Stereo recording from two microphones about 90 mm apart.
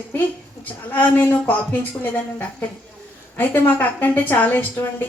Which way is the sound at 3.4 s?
20° left (ahead or behind).